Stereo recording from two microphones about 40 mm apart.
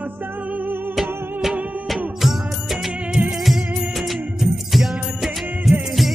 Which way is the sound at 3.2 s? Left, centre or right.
Right.